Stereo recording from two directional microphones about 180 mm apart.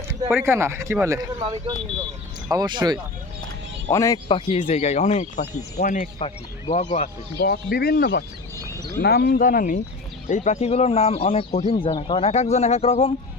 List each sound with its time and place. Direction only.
0.4 s speech: 15° right (ahead or behind)
3.9 s speech: 20° left (ahead or behind); by 6.1 s 45° left (ahead or behind)
6.1 s speech: 35° left (ahead or behind)
7.3 s speech: 60° left (ahead or behind); by 13.1 s 35° left (ahead or behind)